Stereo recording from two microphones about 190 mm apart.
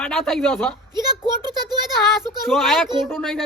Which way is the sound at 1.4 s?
20° right (ahead or behind).